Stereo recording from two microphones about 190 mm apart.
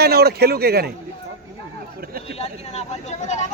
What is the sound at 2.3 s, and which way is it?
Speech, 30° left (ahead or behind).